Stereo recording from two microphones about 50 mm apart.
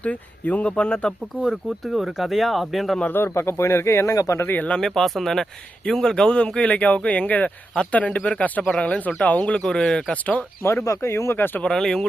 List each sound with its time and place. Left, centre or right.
0.0 s speech: left
1.8 s speech: centre
3.2 s speech: left
4.4 s speech: left
4.8 s a man's voice: centre; by 9.6 s left
9.6 s a man's voice: centre
10.6 s speech: left
10.8 s speech: left
11.3 s speech: left
11.7 s a man's voice: centre